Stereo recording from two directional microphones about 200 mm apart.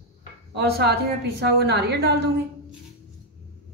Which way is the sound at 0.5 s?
55° right (ahead or behind).